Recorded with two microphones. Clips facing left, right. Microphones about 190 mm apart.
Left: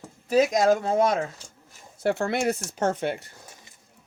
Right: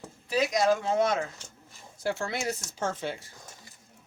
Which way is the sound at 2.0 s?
60° left (ahead or behind).